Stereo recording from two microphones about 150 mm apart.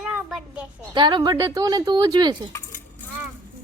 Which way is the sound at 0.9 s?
30° right (ahead or behind).